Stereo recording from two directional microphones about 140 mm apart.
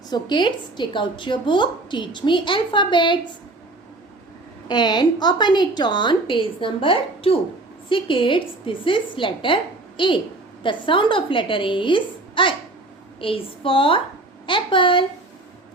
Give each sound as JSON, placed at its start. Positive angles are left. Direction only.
{"t": 0.1, "sound": "a woman's voice", "side_deg": 35}
{"t": 4.7, "sound": "a woman's voice", "side_deg": 30}